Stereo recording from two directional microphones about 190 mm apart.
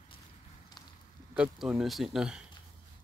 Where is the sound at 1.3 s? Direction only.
5° right (ahead or behind).